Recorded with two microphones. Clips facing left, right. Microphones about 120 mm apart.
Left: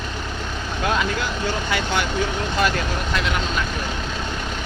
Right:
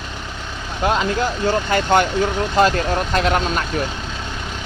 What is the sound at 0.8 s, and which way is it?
Vehicle, 25° right (ahead or behind).